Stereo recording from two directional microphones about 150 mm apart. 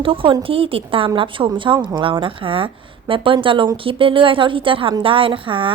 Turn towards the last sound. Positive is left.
turn(degrees=-35)  # may be behind; listen again after turning